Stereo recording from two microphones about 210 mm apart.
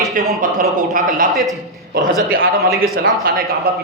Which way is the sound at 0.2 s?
40° right (ahead or behind).